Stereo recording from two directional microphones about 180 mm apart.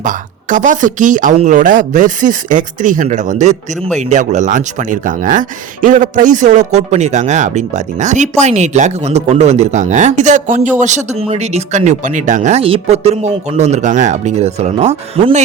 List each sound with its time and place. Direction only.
0.0 s a woman's voice: 45° right (ahead or behind)